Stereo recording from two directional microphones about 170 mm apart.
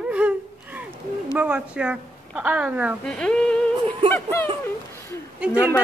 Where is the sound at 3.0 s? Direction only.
5° left (ahead or behind).